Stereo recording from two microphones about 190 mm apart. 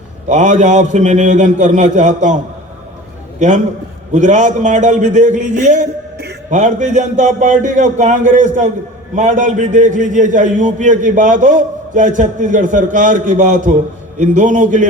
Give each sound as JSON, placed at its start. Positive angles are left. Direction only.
{"t": 0.3, "sound": "a man's voice", "side_deg": -40}